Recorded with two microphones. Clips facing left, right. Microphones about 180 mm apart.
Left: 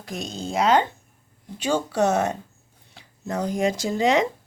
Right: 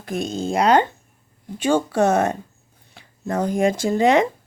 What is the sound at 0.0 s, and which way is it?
Speech, 55° right (ahead or behind).